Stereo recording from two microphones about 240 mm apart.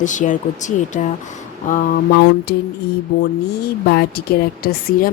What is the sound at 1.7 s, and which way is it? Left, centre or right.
Speech, left.